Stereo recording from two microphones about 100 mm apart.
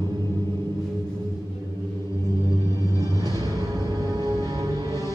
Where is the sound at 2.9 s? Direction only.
40° right (ahead or behind).